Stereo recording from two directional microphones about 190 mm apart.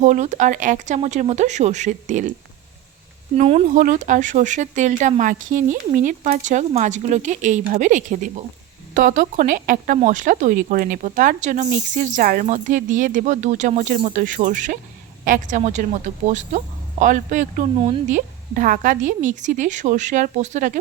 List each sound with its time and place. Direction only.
0.0 s speech: 40° right (ahead or behind)
3.3 s speech: 30° right (ahead or behind)
3.8 s speech: 45° right (ahead or behind)
17.7 s speech: 30° right (ahead or behind)
18.1 s speech: 45° right (ahead or behind)